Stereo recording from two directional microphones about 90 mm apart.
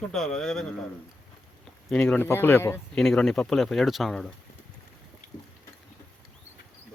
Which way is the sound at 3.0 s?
5° left (ahead or behind).